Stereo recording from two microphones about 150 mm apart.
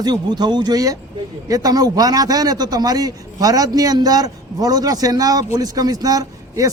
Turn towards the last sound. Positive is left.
turn(degrees=-25)  # may be behind; listen again after turning